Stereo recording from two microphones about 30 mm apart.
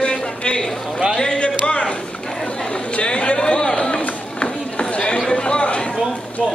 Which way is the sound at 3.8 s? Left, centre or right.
Left.